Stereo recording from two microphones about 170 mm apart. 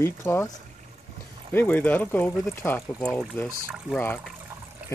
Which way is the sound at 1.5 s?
10° left (ahead or behind).